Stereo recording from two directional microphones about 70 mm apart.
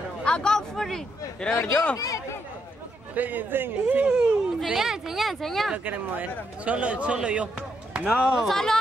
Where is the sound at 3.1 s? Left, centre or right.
Right.